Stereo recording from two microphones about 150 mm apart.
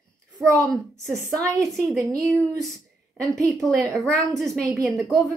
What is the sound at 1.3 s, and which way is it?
Speech, 20° right (ahead or behind).